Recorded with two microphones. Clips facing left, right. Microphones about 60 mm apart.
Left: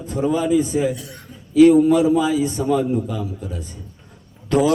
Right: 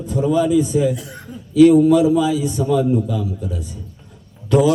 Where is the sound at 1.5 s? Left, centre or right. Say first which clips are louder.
Right 1 dB; left.